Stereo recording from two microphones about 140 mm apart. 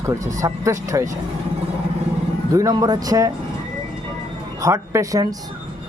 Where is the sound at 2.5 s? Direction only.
25° right (ahead or behind).